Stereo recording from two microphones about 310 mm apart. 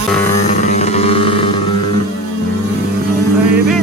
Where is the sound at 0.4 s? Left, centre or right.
Left.